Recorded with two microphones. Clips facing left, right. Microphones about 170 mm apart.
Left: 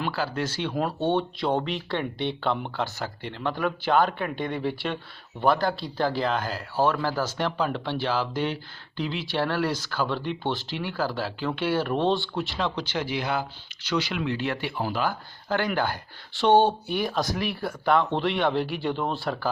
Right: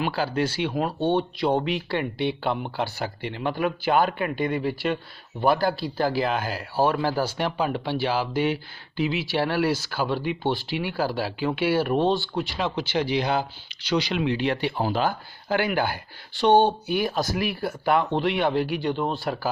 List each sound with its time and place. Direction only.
0.2 s speech: 15° right (ahead or behind)
15.4 s speech: 10° right (ahead or behind)
16.4 s speech: 5° left (ahead or behind)